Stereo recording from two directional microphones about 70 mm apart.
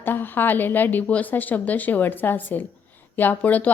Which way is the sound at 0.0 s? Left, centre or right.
Left.